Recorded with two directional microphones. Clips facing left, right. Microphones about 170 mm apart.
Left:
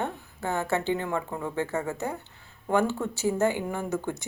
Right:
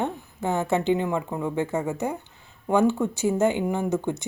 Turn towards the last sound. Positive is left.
turn(degrees=-20)  # may be behind; listen again after turning